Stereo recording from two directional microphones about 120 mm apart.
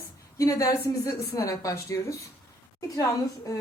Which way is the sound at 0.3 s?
30° left (ahead or behind).